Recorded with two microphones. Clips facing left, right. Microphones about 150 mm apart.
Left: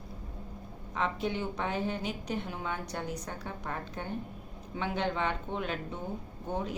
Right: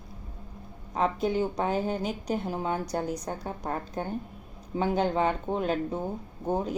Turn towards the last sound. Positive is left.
turn(degrees=-40)  # may be behind; listen again after turning